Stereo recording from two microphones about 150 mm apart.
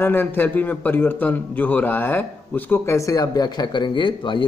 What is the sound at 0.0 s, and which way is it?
A man's voice, 15° left (ahead or behind).